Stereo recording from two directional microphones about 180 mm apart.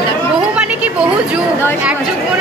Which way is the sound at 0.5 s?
5° right (ahead or behind).